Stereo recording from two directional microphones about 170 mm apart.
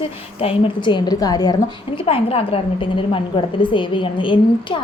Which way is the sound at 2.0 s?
35° left (ahead or behind).